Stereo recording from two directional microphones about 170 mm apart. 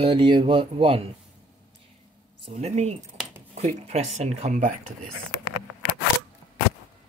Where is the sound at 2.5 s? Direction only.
40° right (ahead or behind).